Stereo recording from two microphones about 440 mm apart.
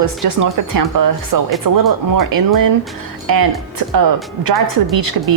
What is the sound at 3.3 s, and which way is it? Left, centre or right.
Speech, right.